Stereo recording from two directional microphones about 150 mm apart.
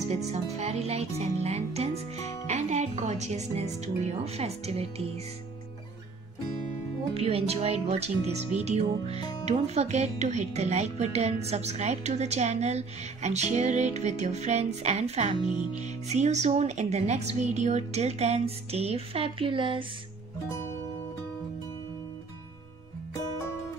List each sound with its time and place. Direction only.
0.1 s speech: 45° right (ahead or behind)
7.2 s speech: 40° right (ahead or behind)
9.0 s speech: 30° left (ahead or behind)
9.5 s speech: 50° right (ahead or behind)
15.4 s speech: 35° left (ahead or behind)
15.8 s speech: 50° right (ahead or behind); by 19.9 s 35° right (ahead or behind)